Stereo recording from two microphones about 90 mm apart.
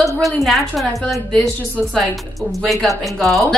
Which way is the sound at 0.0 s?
Centre (ahead or behind).